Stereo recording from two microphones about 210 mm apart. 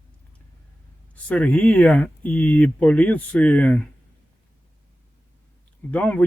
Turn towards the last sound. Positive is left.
turn(degrees=5)  # may be behind; listen again after turning